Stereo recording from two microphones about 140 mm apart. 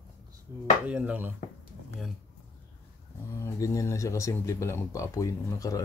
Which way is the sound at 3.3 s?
20° left (ahead or behind).